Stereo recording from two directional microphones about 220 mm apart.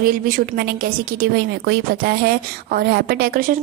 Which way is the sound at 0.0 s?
40° right (ahead or behind).